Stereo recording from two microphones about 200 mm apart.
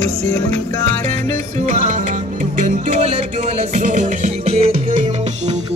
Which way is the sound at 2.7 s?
35° right (ahead or behind).